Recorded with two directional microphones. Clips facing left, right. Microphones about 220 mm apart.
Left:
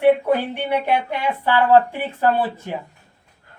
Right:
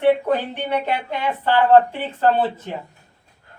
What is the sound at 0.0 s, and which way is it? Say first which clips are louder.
Speech: left 2 dB; 10° left (ahead or behind).